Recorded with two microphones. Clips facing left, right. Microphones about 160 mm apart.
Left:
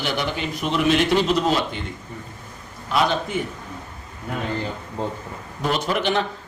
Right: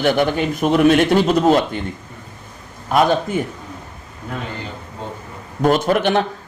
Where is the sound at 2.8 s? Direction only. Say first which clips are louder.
Right 6 dB; 50° right (ahead or behind).